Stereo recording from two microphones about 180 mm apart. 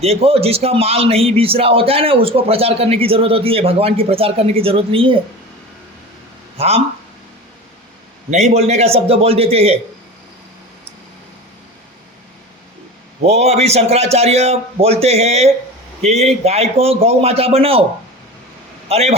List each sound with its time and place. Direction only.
0.0 s a man's voice: 35° right (ahead or behind)
6.6 s a man's voice: 35° right (ahead or behind)
8.3 s a man's voice: 40° right (ahead or behind)
13.2 s a man's voice: 35° right (ahead or behind)
18.9 s speech: 35° right (ahead or behind)